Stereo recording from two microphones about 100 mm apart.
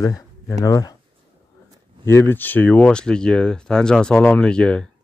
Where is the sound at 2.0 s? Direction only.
25° left (ahead or behind).